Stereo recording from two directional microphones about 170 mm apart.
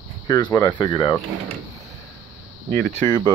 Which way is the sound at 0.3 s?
25° left (ahead or behind).